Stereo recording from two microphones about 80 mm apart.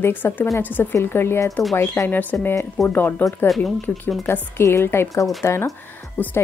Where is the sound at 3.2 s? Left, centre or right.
Left.